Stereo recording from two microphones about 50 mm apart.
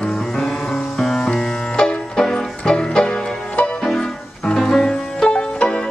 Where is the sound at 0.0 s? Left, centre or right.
Centre.